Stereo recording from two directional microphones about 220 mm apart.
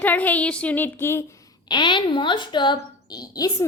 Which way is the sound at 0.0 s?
10° left (ahead or behind).